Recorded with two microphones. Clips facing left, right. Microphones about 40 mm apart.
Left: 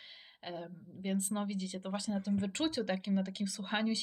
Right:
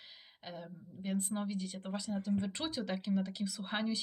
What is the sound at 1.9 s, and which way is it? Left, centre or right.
Speech, centre.